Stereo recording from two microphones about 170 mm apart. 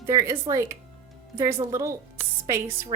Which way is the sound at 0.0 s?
20° right (ahead or behind).